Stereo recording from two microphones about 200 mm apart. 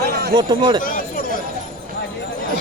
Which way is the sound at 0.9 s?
45° left (ahead or behind).